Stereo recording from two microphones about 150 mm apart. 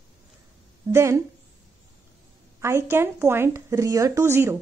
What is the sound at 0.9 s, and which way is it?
Speech, 20° right (ahead or behind).